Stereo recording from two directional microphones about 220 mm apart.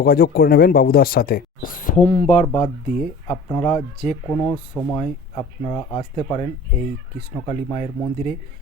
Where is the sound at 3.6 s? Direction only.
25° left (ahead or behind).